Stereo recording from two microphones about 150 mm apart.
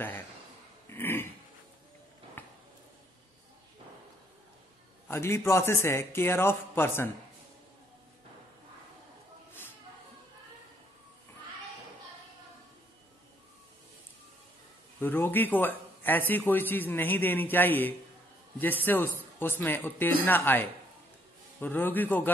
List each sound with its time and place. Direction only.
0.8 s throat clearing: 15° left (ahead or behind)
2.4 s a sound: 10° left (ahead or behind)
5.0 s a man's voice: 15° left (ahead or behind)
15.0 s a man's voice: 15° left (ahead or behind)